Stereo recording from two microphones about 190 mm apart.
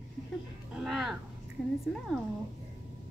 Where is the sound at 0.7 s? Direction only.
Centre (ahead or behind).